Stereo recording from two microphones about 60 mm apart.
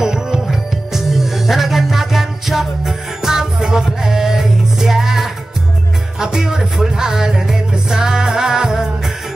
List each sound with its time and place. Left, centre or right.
0.0 s music: centre